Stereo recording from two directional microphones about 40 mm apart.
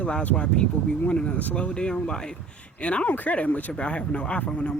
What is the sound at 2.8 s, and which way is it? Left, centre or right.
Speech, left.